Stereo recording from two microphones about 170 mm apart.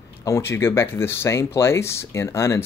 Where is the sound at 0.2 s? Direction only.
15° left (ahead or behind).